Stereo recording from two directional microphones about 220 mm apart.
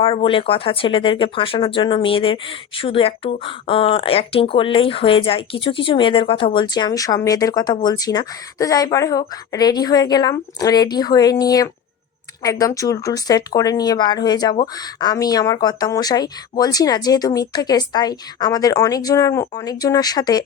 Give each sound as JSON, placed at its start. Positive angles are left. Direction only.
{"t": 0.0, "sound": "speech", "side_deg": 25}